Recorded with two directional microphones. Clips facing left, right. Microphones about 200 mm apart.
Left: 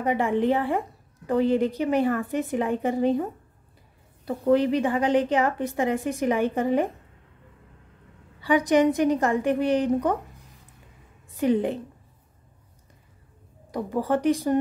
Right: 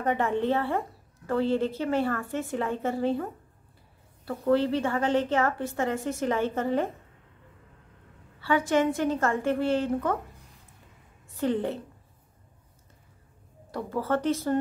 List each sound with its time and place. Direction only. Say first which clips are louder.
0.0 s a woman's voice: left 3 dB; 10° left (ahead or behind)
4.3 s a woman's voice: left 3 dB; 15° left (ahead or behind)
8.4 s a woman's voice: left 4 dB; 15° left (ahead or behind)
11.2 s a woman's voice: left 4 dB; 15° left (ahead or behind)
13.7 s a woman's voice: left 3 dB; 15° left (ahead or behind)